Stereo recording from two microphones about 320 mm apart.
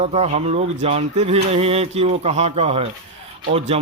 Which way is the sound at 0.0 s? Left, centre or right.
Centre.